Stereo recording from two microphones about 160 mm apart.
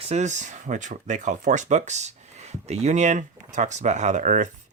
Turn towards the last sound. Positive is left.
turn(degrees=-50)  # may be behind; listen again after turning